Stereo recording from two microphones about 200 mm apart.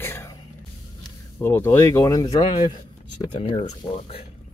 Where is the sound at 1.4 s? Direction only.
10° left (ahead or behind).